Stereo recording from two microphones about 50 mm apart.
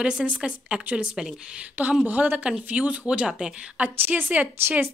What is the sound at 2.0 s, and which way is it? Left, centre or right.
A woman's voice, right.